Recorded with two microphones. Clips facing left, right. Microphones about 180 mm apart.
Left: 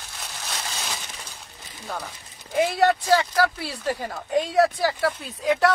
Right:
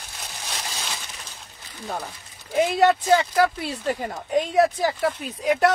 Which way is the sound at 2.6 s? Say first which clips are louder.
Right 2 dB; 20° right (ahead or behind).